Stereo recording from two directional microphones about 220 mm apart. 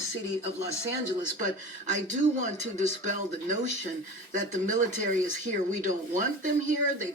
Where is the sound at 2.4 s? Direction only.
35° right (ahead or behind).